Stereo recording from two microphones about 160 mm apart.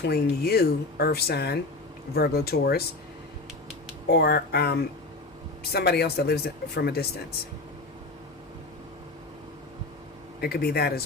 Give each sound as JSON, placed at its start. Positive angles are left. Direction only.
{"t": 0.0, "sound": "speech", "side_deg": 80}
{"t": 4.1, "sound": "speech", "side_deg": 90}
{"t": 10.4, "sound": "speech", "side_deg": 75}